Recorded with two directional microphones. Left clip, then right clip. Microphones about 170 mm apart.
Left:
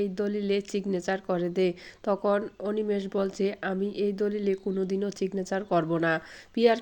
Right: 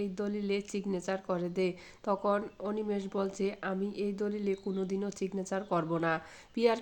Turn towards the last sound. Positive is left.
turn(degrees=20)  # may be behind; listen again after turning